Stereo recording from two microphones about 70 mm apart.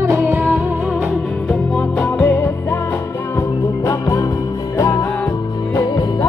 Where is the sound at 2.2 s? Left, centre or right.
Left.